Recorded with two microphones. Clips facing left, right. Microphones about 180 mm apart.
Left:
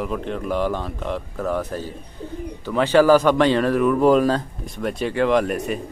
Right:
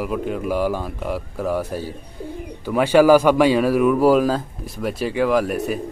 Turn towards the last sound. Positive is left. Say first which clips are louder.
# even
turn(degrees=-5)  # may be behind; listen again after turning